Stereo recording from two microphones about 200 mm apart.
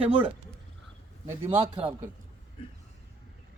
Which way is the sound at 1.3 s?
30° right (ahead or behind).